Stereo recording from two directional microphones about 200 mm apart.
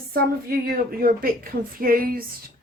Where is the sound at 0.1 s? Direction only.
50° right (ahead or behind).